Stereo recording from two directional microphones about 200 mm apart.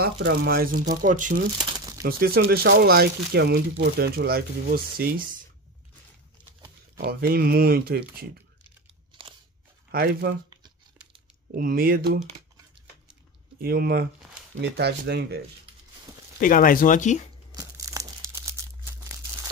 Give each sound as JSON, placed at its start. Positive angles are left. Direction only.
{"t": 0.0, "sound": "speech", "side_deg": -60}
{"t": 1.6, "sound": "crumpling", "side_deg": -20}
{"t": 2.0, "sound": "speech", "side_deg": -50}
{"t": 7.0, "sound": "speech", "side_deg": -50}
{"t": 9.8, "sound": "speech", "side_deg": -50}
{"t": 11.5, "sound": "speech", "side_deg": -45}
{"t": 13.6, "sound": "speech", "side_deg": -50}
{"t": 16.3, "sound": "speech", "side_deg": 45}
{"t": 17.6, "sound": "crumpling", "side_deg": -15}